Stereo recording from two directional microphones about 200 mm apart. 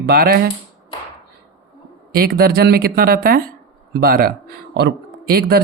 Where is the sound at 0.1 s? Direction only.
50° right (ahead or behind).